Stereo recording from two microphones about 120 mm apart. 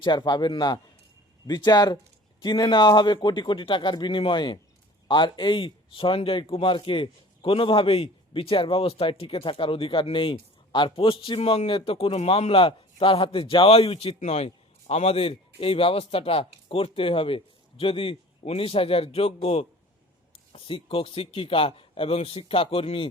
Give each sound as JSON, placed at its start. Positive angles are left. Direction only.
{"t": 0.0, "sound": "speech", "side_deg": 40}
{"t": 14.2, "sound": "speech", "side_deg": 65}